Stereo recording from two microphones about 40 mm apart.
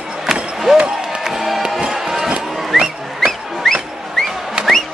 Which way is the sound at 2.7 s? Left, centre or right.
Centre.